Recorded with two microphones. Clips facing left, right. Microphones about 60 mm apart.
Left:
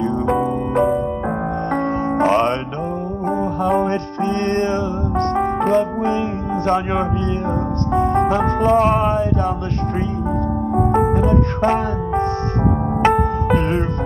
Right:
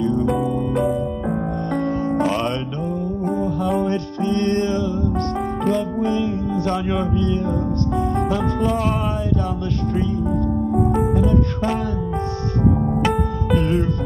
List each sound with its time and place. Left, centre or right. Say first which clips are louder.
0.0 s music: left 1 dB; left
3.6 s music: left 6 dB; left
10.7 s music: left 5 dB; left